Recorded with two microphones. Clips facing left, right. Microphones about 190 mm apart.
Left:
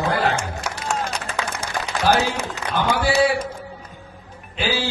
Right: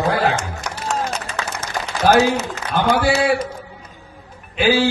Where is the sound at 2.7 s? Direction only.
50° right (ahead or behind).